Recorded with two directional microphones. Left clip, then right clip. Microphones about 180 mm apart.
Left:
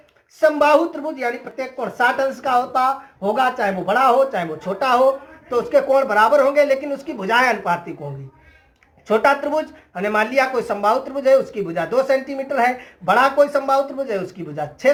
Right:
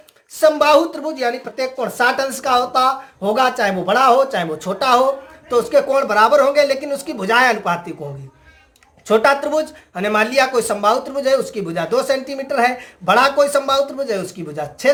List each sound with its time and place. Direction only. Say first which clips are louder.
0.3 s speech: right 2 dB; 35° right (ahead or behind)
9.0 s speech: right 2 dB; 30° right (ahead or behind)